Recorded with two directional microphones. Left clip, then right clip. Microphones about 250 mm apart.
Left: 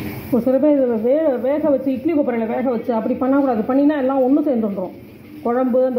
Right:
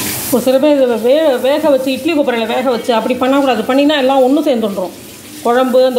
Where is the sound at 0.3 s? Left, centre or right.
Centre.